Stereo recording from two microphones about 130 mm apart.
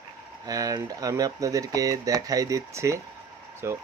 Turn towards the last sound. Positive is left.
turn(degrees=-20)  # may be behind; listen again after turning